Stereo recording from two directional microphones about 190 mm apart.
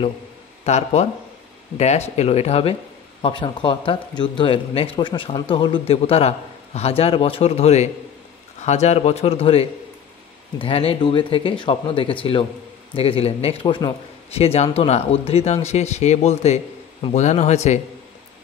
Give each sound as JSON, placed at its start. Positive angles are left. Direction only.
{"t": 0.7, "sound": "speech", "side_deg": 35}